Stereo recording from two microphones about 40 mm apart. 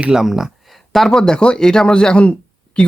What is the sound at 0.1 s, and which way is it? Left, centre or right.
Speech, centre.